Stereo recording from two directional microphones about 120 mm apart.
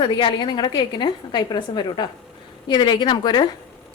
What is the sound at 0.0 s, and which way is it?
A woman's voice, 45° left (ahead or behind).